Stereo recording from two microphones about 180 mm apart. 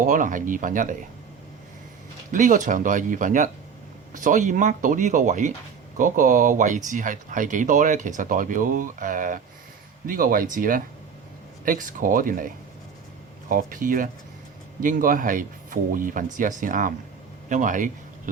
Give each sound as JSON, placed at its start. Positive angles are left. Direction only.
{"t": 0.0, "sound": "speech", "side_deg": -45}
{"t": 2.3, "sound": "speech", "side_deg": -45}
{"t": 13.5, "sound": "speech", "side_deg": -50}